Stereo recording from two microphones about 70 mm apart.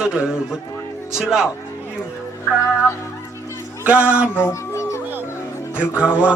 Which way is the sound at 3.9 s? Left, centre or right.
Right.